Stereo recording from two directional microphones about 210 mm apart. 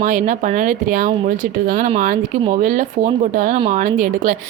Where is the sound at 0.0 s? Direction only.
40° right (ahead or behind).